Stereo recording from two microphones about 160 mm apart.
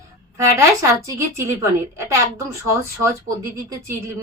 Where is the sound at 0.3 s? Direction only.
20° right (ahead or behind).